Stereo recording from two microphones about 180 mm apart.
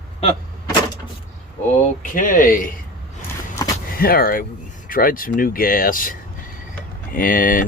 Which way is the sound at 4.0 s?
55° left (ahead or behind).